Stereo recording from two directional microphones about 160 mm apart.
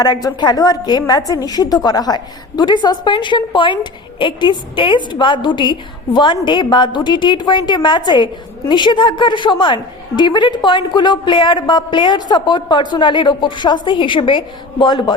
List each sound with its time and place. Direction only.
0.0 s a woman's voice: 25° left (ahead or behind)